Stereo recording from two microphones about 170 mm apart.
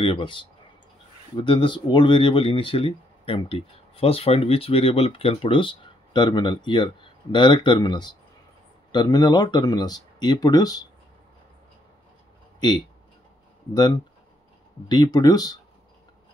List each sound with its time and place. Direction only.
0.0 s speech: 30° left (ahead or behind)
12.5 s speech: 25° left (ahead or behind)
14.9 s speech: 25° left (ahead or behind)